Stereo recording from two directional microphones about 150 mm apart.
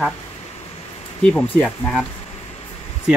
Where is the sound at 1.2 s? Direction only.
5° left (ahead or behind).